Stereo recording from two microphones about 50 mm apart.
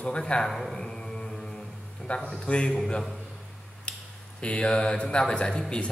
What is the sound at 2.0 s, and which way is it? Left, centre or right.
Mantra, centre.